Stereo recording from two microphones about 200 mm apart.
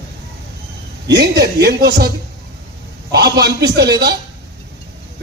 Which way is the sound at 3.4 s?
55° right (ahead or behind).